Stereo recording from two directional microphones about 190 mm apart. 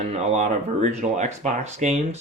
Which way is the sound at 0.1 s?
35° right (ahead or behind).